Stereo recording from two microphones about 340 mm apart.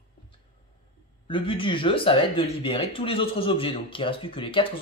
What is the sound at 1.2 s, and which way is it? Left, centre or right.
Speech, centre.